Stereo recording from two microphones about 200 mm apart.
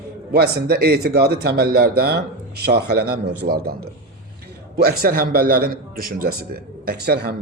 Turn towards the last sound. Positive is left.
turn(degrees=-50)  # may be behind; listen again after turning